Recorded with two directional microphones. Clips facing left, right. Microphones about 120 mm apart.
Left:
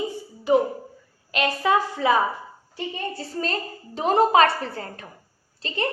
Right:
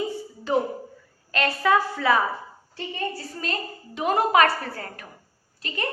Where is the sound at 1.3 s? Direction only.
20° left (ahead or behind).